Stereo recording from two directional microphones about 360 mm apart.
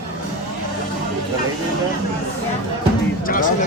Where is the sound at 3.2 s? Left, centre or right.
Left.